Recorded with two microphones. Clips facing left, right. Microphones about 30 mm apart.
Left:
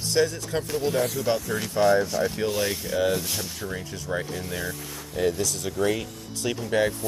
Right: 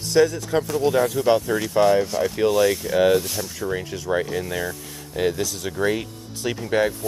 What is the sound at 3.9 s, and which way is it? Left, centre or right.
Speech, right.